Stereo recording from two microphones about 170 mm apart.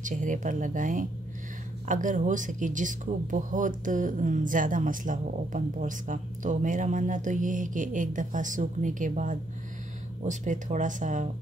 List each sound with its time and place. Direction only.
0.0 s speech: 50° right (ahead or behind)